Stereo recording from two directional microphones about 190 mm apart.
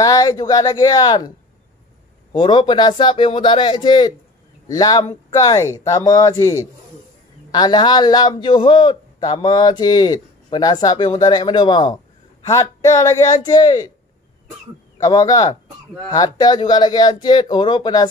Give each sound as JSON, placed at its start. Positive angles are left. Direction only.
{"t": 0.0, "sound": "a man's voice", "side_deg": 20}
{"t": 2.3, "sound": "a man's voice", "side_deg": 25}
{"t": 15.0, "sound": "a man's voice", "side_deg": 20}